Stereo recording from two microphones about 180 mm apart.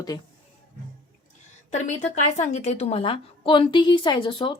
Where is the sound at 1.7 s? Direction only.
40° left (ahead or behind).